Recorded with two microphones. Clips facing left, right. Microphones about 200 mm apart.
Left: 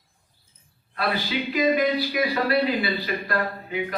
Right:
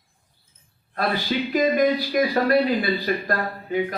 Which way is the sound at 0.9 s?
45° right (ahead or behind).